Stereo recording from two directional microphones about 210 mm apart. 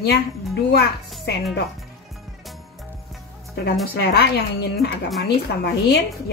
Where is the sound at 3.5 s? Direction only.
50° left (ahead or behind).